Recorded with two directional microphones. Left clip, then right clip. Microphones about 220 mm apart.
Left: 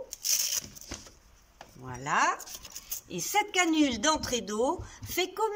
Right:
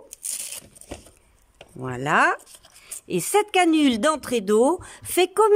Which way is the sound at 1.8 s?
55° right (ahead or behind).